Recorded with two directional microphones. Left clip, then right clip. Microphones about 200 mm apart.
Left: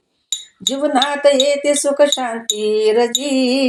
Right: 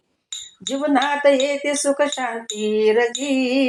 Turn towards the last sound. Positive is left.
turn(degrees=40)  # may be behind; listen again after turning